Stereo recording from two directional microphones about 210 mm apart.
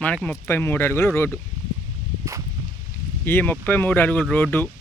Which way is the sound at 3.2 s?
10° left (ahead or behind).